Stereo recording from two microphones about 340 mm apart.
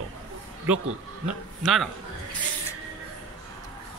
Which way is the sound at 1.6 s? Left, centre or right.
Centre.